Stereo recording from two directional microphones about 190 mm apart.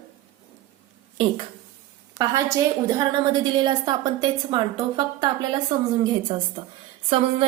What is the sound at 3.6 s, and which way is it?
A woman's voice, 20° right (ahead or behind).